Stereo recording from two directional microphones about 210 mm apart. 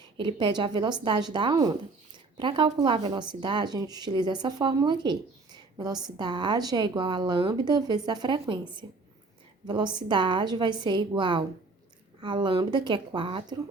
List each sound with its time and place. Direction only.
0.0 s a woman's voice: 20° right (ahead or behind)